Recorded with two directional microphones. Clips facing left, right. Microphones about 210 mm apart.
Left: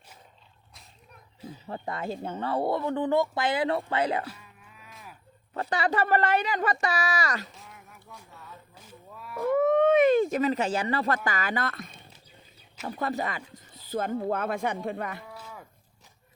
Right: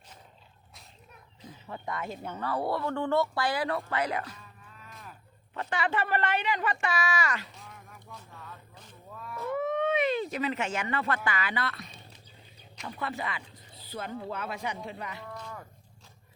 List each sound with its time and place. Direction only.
1.6 s speech: 35° left (ahead or behind)
4.3 s cattle: 10° left (ahead or behind)
5.5 s a man's voice: 35° left (ahead or behind)
7.5 s a sound: centre (ahead or behind)
9.4 s speech: 50° left (ahead or behind)
13.0 s a man's voice: 40° left (ahead or behind)
15.3 s cattle: 5° left (ahead or behind)